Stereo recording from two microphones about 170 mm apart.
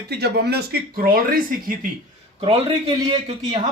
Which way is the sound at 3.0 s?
30° right (ahead or behind).